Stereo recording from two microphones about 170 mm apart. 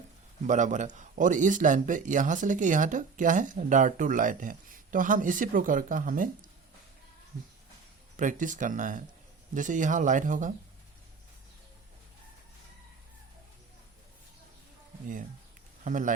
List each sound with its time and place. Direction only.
0.4 s speech: 45° right (ahead or behind)
8.1 s speech: 50° right (ahead or behind)
15.8 s speech: 50° right (ahead or behind)